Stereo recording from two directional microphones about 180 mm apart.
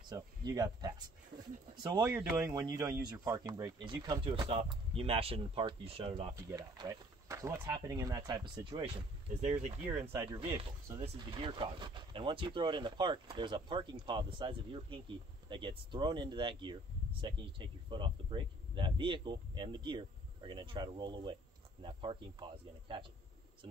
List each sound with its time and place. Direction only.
0.1 s speech: 20° right (ahead or behind)
2.0 s speech: 5° right (ahead or behind)
2.4 s speech: 20° right (ahead or behind)
6.3 s speech: 20° right (ahead or behind)
9.4 s speech: 40° right (ahead or behind)
10.1 s speech: 15° right (ahead or behind)
11.0 s speech: 30° right (ahead or behind)